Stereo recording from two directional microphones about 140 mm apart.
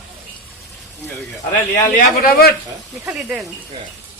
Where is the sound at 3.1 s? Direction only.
5° right (ahead or behind).